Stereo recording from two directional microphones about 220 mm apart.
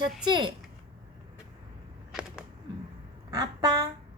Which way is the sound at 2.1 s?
Centre (ahead or behind).